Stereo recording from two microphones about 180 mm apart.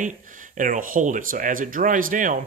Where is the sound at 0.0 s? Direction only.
45° right (ahead or behind).